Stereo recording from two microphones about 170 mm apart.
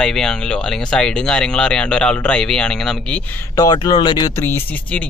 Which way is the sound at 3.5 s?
25° left (ahead or behind).